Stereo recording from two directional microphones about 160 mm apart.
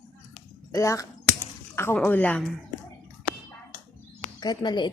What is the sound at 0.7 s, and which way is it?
Speech, 20° left (ahead or behind).